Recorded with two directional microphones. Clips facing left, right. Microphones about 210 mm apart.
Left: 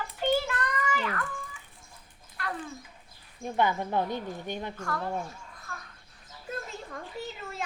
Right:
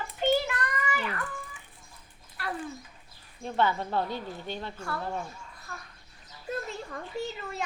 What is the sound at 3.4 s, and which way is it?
A woman's voice, 15° left (ahead or behind).